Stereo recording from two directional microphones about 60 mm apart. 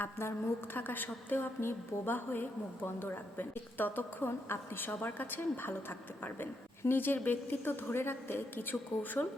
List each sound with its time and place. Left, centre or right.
0.0 s a woman's voice: left
0.8 s a woman's voice: left
4.3 s a woman's voice: left